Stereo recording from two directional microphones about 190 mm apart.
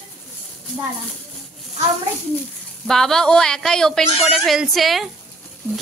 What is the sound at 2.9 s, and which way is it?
A child's voice, centre (ahead or behind).